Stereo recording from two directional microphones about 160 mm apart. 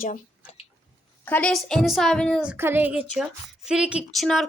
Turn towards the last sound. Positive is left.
turn(degrees=0)  # may be behind; listen again after turning